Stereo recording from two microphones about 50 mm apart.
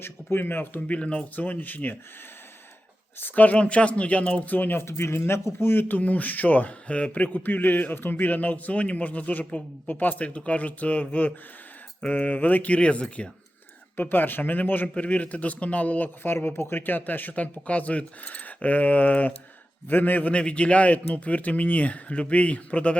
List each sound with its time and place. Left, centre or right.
0.0 s speech: left
0.9 s speech: left
3.2 s speech: left
4.8 s speech: left
5.9 s speech: left
9.4 s speech: left
9.8 s speech: left
12.1 s speech: left
13.9 s speech: left
16.2 s speech: left
20.3 s speech: left